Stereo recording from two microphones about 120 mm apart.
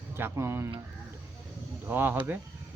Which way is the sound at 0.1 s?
20° right (ahead or behind).